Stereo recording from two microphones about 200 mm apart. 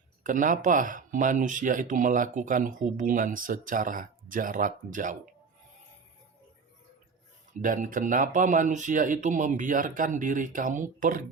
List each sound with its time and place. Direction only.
0.2 s speech: 40° right (ahead or behind)
7.6 s speech: 40° right (ahead or behind)